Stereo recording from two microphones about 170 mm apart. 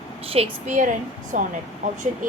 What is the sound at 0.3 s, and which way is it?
A woman's voice, 40° right (ahead or behind).